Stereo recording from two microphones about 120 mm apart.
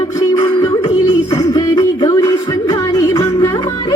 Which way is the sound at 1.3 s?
30° left (ahead or behind).